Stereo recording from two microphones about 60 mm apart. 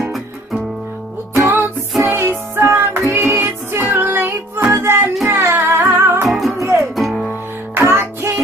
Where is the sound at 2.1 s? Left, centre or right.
Right.